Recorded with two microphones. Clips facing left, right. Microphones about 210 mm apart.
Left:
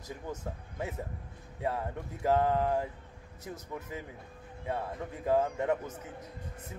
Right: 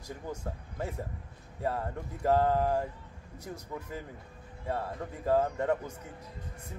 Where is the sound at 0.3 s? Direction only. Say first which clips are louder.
Right 1 dB; 5° left (ahead or behind).